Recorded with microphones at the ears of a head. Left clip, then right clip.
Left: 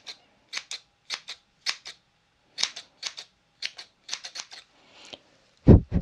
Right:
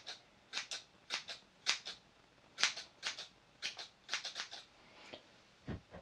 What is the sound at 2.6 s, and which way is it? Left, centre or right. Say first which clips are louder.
Typewriter: left 6 dB; left.